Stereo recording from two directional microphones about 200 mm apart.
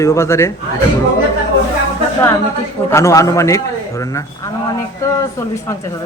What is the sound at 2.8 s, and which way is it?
A man's voice, 15° left (ahead or behind).